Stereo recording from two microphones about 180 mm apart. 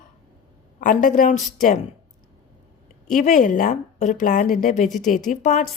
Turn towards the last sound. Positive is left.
turn(degrees=40)  # may be behind; listen again after turning